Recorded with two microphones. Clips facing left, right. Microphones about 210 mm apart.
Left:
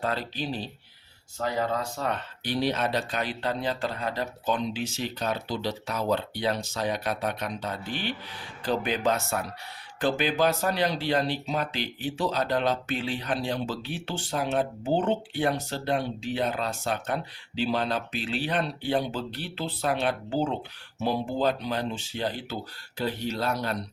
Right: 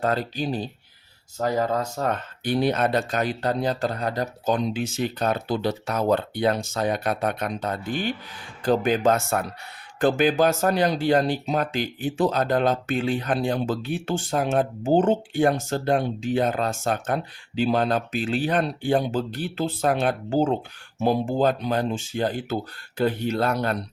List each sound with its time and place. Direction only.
0.0 s speech: 45° right (ahead or behind)